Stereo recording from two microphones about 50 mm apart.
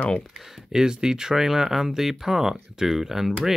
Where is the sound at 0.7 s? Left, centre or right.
Centre.